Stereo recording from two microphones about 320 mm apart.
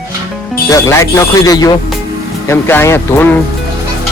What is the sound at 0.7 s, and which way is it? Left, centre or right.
Speech, centre.